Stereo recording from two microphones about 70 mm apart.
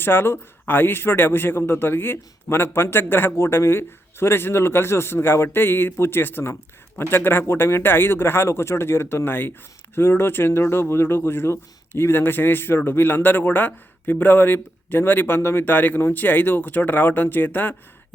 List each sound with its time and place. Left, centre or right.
0.0 s speech: left